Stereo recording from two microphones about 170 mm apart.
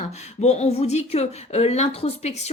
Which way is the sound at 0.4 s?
40° left (ahead or behind).